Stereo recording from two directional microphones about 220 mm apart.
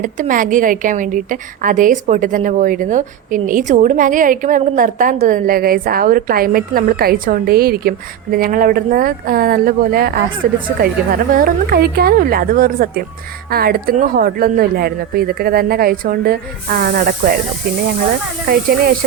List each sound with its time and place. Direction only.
0.0 s a woman's voice: 35° right (ahead or behind)